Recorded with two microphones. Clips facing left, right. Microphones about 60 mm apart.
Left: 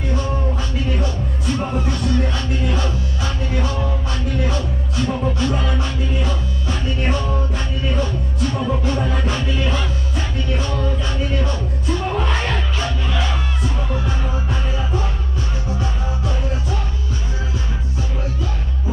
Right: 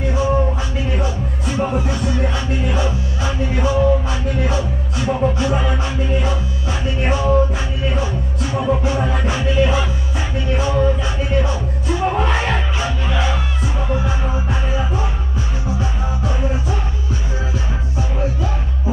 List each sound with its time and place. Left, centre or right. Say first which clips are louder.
0.7 s music: right 1 dB; centre